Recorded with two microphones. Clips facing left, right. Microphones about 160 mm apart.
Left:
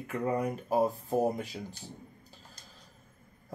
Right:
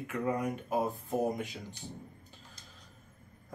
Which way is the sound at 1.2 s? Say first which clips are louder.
Left 1 dB; 35° left (ahead or behind).